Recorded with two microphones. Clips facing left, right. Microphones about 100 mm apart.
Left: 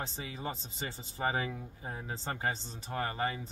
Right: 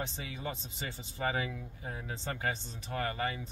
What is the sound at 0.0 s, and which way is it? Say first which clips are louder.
Speech: even; 30° left (ahead or behind).